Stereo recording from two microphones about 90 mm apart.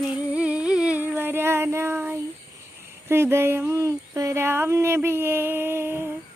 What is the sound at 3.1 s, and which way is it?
Speech, 25° right (ahead or behind).